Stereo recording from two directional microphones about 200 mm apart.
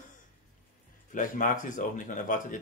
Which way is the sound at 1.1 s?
40° left (ahead or behind).